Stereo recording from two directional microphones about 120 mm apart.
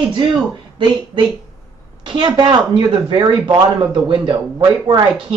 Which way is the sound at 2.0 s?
40° right (ahead or behind).